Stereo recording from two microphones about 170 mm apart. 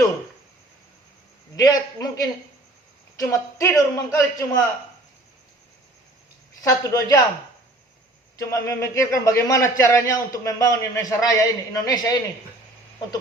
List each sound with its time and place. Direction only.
1.5 s a man's voice: 20° left (ahead or behind)
6.6 s a man's voice: 20° left (ahead or behind)
8.4 s a man's voice: 20° left (ahead or behind)